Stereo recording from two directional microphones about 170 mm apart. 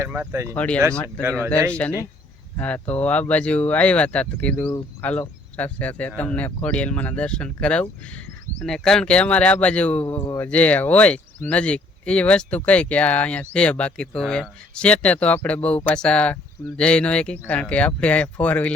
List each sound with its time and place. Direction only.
0.0 s speech: 15° right (ahead or behind)
0.5 s speech: 5° left (ahead or behind)
1.2 s speech: 15° right (ahead or behind)
1.7 s speech: 5° left (ahead or behind)